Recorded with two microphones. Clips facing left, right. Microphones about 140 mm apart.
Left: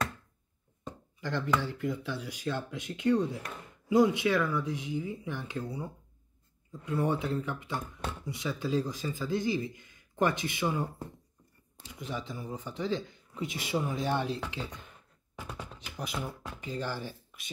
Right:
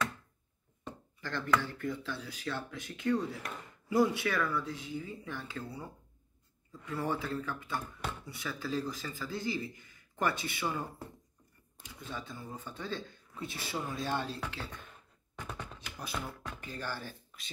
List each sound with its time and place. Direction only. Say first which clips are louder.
1.2 s speech: left 2 dB; 15° left (ahead or behind)
15.3 s chopping: left 1 dB; 5° left (ahead or behind)
15.8 s speech: left 5 dB; 20° left (ahead or behind)
17.1 s a sound: left 2 dB; 5° left (ahead or behind)